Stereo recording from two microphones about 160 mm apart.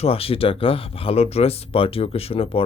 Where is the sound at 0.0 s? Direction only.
35° left (ahead or behind).